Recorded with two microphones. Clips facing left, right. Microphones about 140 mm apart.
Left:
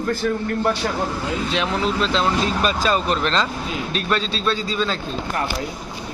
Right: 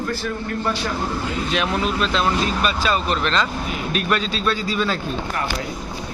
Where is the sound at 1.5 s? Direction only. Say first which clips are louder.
Right 1 dB; 30° left (ahead or behind).